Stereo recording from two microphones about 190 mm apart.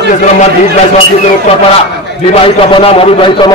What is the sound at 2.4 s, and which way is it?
Speech, 30° left (ahead or behind).